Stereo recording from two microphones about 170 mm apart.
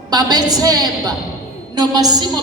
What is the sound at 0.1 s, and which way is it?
A woman's voice, 25° right (ahead or behind).